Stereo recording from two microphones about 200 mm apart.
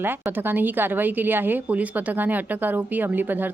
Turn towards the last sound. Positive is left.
turn(degrees=-10)  # may be behind; listen again after turning